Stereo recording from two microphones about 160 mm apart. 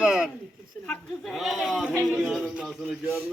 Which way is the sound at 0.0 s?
5° right (ahead or behind).